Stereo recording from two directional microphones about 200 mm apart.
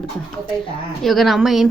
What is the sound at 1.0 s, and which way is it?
Speech, centre (ahead or behind).